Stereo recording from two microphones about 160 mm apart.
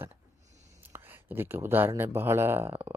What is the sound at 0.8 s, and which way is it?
Speech, 10° right (ahead or behind).